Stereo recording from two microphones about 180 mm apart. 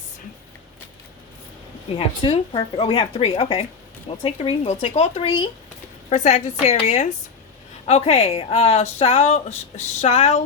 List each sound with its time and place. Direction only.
2.2 s speech: 30° left (ahead or behind)
6.1 s speech: 40° left (ahead or behind)